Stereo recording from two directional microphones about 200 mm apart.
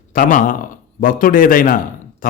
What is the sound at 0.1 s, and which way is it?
A man's voice, 40° left (ahead or behind).